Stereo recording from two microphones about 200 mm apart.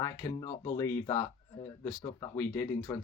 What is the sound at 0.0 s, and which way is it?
Speech, 15° left (ahead or behind).